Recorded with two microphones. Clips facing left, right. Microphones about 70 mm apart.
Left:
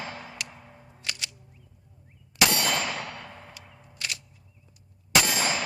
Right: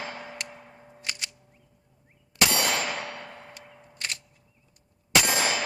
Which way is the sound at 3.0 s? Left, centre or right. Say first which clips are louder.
Right 1 dB; centre.